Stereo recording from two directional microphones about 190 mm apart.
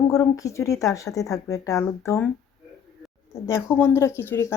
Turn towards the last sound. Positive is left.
turn(degrees=10)  # may be behind; listen again after turning